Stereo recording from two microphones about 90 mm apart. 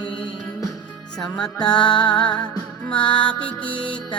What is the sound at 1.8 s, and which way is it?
Music, 55° left (ahead or behind).